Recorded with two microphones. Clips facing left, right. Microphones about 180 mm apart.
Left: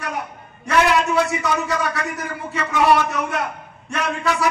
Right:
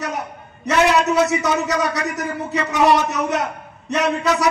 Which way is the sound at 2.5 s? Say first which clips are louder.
Right 1 dB; 20° right (ahead or behind).